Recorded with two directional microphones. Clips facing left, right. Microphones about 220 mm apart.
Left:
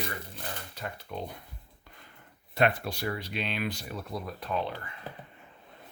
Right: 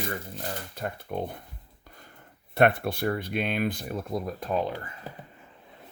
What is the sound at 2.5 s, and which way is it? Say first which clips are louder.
Speech: right 5 dB; 55° right (ahead or behind).